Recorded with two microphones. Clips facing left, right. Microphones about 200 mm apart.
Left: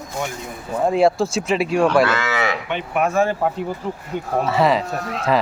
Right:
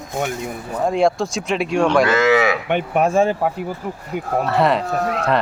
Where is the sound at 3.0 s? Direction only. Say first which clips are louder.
Right 2 dB; 30° right (ahead or behind).